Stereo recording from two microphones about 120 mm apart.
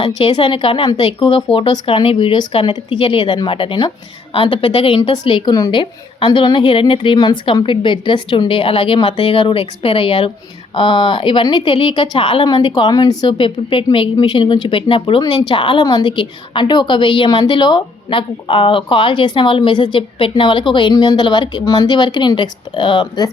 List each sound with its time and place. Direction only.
0.2 s a woman's voice: 45° left (ahead or behind)
15.2 s a woman's voice: 30° left (ahead or behind)
15.4 s a woman's voice: 45° left (ahead or behind)